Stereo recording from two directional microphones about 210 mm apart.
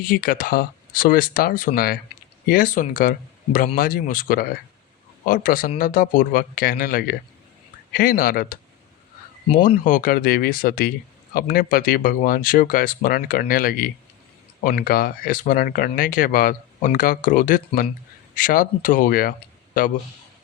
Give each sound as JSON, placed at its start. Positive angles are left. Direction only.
{"t": 0.0, "sound": "speech", "side_deg": 40}
{"t": 9.6, "sound": "speech", "side_deg": 40}